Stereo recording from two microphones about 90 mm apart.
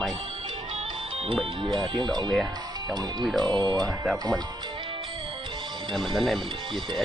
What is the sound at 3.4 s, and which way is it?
Speech, 50° right (ahead or behind).